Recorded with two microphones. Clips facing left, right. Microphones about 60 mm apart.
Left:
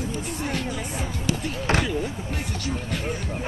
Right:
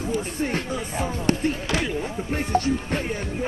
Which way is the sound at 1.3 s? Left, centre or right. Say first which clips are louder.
Right 4 dB; right.